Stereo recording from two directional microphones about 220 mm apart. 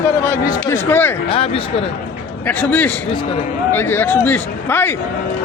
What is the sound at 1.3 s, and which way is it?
Speech, 25° left (ahead or behind).